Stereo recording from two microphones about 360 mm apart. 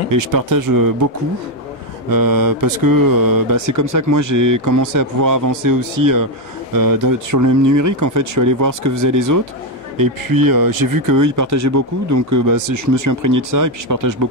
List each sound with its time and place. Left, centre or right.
0.1 s speech: right
2.0 s speech: right
9.9 s speech: right